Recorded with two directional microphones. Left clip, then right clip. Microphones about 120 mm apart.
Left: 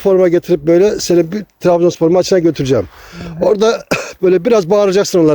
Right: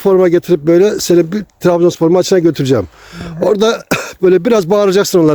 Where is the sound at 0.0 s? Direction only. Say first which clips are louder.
Right 1 dB; 40° right (ahead or behind).